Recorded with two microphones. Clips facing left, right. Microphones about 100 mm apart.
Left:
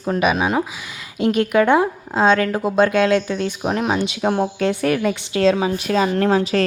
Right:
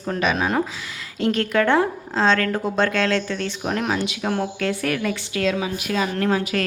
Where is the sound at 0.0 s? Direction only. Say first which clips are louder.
Left 4 dB; 15° left (ahead or behind).